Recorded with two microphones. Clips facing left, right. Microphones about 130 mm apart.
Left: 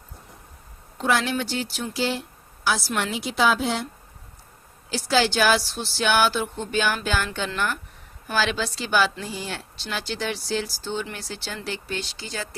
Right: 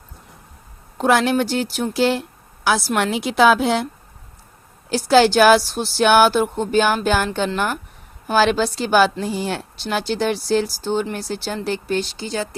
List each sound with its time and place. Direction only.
0.9 s a woman's voice: 50° right (ahead or behind); by 3.8 s 70° right (ahead or behind)
4.9 s speech: 50° right (ahead or behind)
12.1 s speech: 25° right (ahead or behind)